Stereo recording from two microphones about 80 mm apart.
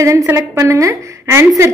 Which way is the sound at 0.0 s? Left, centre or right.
Right.